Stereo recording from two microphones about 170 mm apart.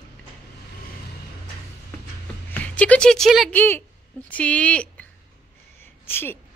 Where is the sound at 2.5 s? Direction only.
10° left (ahead or behind).